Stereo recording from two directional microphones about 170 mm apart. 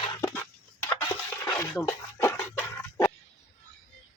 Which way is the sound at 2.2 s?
15° left (ahead or behind).